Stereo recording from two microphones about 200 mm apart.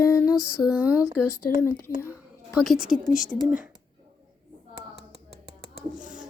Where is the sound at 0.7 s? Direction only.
5° right (ahead or behind).